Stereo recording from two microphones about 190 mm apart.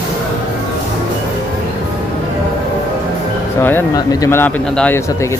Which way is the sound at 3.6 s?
10° left (ahead or behind).